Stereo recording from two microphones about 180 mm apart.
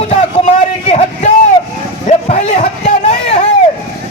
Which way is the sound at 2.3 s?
40° left (ahead or behind).